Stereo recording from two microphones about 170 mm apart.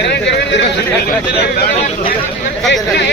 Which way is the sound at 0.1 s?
90° left.